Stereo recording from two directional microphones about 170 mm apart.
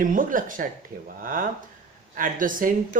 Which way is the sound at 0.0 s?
50° right (ahead or behind).